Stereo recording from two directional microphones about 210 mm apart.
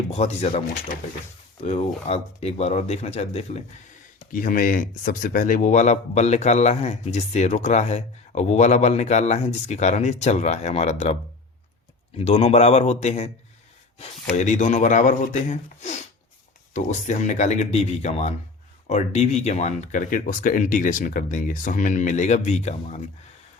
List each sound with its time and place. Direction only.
0.1 s a man's voice: 30° left (ahead or behind)
1.6 s a man's voice: 30° left (ahead or behind)